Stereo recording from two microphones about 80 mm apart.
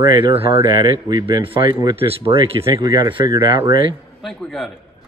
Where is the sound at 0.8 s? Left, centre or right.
Right.